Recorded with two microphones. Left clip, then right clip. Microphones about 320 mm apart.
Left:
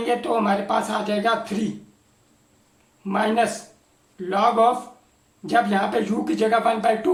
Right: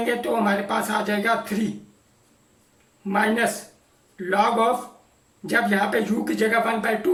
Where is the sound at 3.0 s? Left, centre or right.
Centre.